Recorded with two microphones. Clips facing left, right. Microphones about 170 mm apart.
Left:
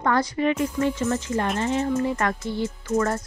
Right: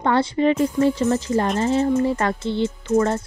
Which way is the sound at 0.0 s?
25° right (ahead or behind).